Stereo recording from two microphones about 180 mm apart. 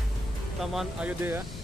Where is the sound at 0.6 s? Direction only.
Centre (ahead or behind).